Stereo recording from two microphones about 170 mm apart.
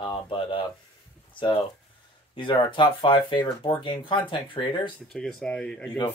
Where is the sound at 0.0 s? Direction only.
25° left (ahead or behind).